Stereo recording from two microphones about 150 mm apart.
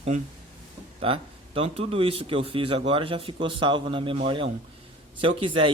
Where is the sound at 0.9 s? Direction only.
40° right (ahead or behind).